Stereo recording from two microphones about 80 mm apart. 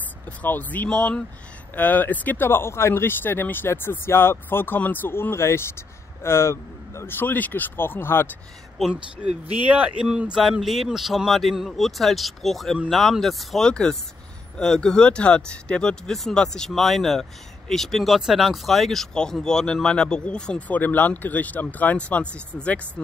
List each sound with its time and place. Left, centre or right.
0.4 s speech: left
8.8 s speech: centre
9.7 s speech: centre